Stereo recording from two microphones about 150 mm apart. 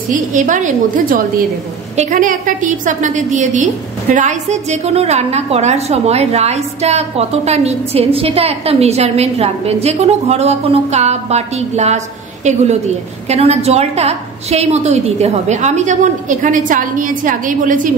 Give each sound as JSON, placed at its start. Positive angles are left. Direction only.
{"t": 0.1, "sound": "a woman's voice", "side_deg": -60}
{"t": 2.0, "sound": "a woman's voice", "side_deg": -55}